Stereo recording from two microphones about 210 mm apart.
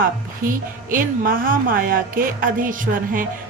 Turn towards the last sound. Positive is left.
turn(degrees=-40)  # may be behind; listen again after turning